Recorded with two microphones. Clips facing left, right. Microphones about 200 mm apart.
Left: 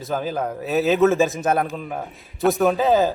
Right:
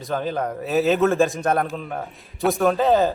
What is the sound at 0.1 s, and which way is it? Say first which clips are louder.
Speech: even; centre (ahead or behind).